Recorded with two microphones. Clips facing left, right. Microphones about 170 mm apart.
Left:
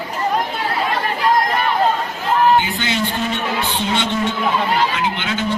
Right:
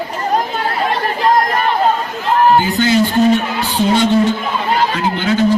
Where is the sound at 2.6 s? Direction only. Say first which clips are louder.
Right 7 dB; 40° right (ahead or behind).